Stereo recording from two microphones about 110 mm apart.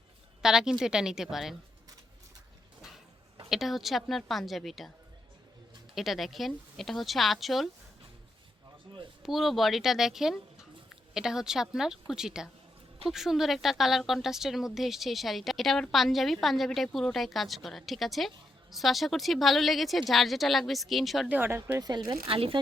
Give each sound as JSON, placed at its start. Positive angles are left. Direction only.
{"t": 0.4, "sound": "a woman's voice", "side_deg": -5}
{"t": 3.5, "sound": "a woman's voice", "side_deg": 0}
{"t": 5.9, "sound": "a woman's voice", "side_deg": 0}
{"t": 9.2, "sound": "a woman's voice", "side_deg": 0}
{"t": 21.2, "sound": "speech", "side_deg": -20}
{"t": 21.8, "sound": "speech", "side_deg": -35}
{"t": 22.3, "sound": "speech", "side_deg": -55}